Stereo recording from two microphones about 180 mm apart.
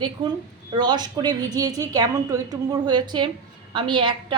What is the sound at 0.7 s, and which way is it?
A woman's voice, 25° right (ahead or behind).